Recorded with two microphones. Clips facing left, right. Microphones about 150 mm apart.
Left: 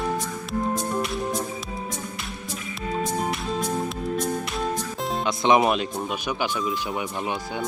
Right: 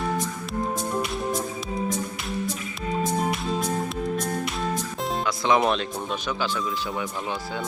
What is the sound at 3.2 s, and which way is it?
Music, centre (ahead or behind).